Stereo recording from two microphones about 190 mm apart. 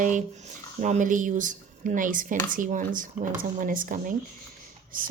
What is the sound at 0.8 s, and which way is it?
A woman's voice, 40° right (ahead or behind).